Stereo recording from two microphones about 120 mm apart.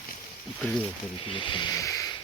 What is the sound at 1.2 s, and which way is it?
Speech, 45° left (ahead or behind).